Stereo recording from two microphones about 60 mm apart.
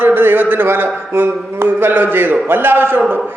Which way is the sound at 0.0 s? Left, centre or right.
Right.